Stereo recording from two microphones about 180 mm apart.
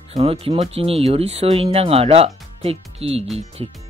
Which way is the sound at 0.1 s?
35° right (ahead or behind).